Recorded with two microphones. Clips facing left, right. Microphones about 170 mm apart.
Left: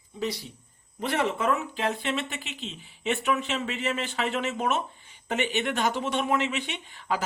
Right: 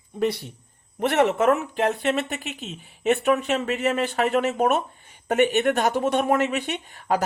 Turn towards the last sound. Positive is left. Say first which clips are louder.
# right 6 dB
turn(degrees=-45)  # may be behind; listen again after turning